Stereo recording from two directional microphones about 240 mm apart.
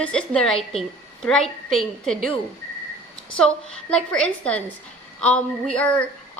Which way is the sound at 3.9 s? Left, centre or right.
Centre.